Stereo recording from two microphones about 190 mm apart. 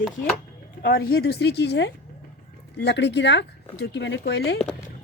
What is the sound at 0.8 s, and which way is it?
Speech, 50° left (ahead or behind).